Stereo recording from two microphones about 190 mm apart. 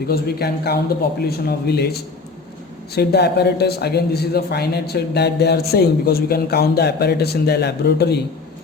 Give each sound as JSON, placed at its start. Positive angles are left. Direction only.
{"t": 0.1, "sound": "speech", "side_deg": 55}